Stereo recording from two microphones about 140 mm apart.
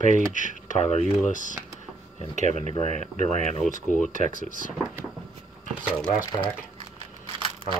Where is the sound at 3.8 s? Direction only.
65° left (ahead or behind).